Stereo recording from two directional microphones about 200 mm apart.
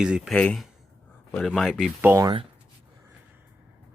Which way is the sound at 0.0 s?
5° right (ahead or behind).